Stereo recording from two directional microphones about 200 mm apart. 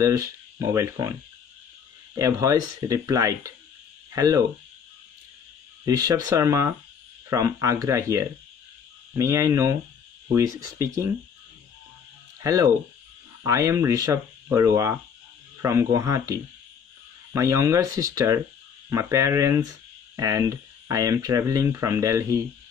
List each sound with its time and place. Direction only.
0.0 s speech: 15° right (ahead or behind)
2.1 s speech: 15° right (ahead or behind)
5.9 s speech: 20° right (ahead or behind)
12.4 s speech: 15° right (ahead or behind)